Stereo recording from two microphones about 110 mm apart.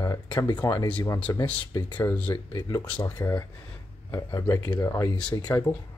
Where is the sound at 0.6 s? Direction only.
30° left (ahead or behind).